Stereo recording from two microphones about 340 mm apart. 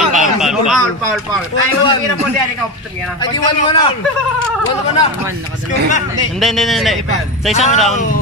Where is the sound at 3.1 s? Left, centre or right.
Centre.